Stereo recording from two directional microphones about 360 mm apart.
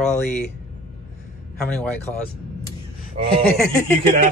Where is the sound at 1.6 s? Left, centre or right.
Centre.